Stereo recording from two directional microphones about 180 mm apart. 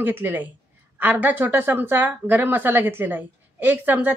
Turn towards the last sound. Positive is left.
turn(degrees=-10)  # may be behind; listen again after turning